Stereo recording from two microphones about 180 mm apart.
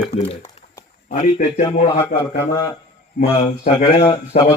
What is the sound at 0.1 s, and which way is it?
A man's voice, 35° left (ahead or behind).